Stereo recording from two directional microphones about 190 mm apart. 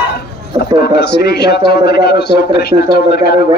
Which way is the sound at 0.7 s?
60° left (ahead or behind).